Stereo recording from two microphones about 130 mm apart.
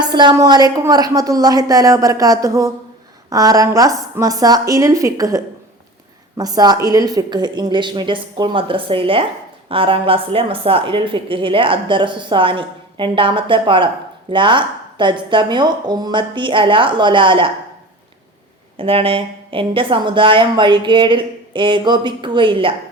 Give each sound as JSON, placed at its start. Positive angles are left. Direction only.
{"t": 0.0, "sound": "a woman's voice", "side_deg": -35}
{"t": 18.8, "sound": "a woman's voice", "side_deg": -45}